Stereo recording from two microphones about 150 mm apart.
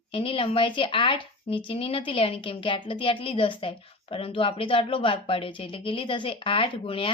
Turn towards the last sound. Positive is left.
turn(degrees=35)  # may be behind; listen again after turning